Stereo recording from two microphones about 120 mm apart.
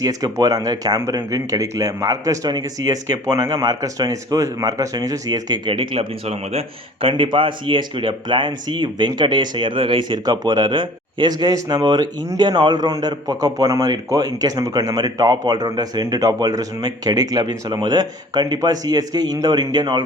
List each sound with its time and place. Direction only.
0.0 s speech: 30° right (ahead or behind)